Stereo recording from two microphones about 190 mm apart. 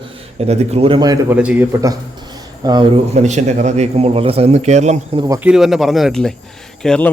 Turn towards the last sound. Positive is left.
turn(degrees=5)  # may be behind; listen again after turning